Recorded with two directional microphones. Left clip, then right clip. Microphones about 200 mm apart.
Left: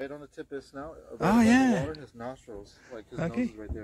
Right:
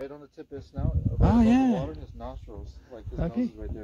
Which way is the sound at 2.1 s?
35° left (ahead or behind).